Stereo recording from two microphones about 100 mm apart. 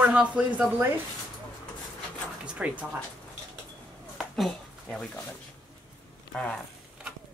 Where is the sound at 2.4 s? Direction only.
10° right (ahead or behind).